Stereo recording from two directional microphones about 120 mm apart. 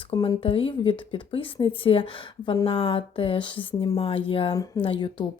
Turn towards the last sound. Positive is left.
turn(degrees=40)  # may be behind; listen again after turning